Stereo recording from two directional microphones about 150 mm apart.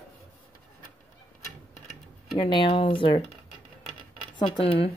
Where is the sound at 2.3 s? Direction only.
35° left (ahead or behind).